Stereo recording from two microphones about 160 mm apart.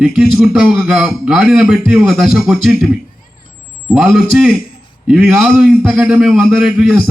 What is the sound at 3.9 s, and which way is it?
A man's voice, 5° right (ahead or behind).